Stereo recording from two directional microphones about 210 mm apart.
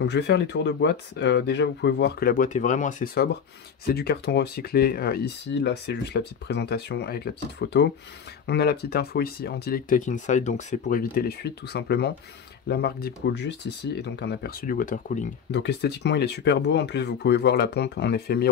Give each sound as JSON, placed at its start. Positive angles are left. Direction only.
{"t": 0.0, "sound": "speech", "side_deg": 55}
{"t": 15.5, "sound": "speech", "side_deg": 55}